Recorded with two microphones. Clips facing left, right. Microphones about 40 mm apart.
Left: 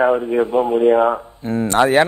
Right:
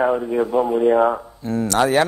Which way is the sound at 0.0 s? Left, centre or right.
Left.